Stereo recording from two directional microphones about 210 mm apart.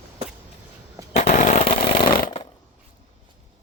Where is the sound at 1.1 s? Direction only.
30° left (ahead or behind).